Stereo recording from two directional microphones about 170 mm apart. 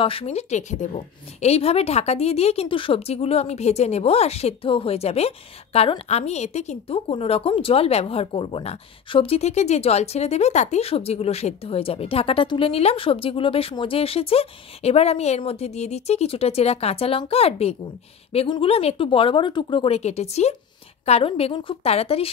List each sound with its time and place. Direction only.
0.0 s a woman's voice: 35° left (ahead or behind)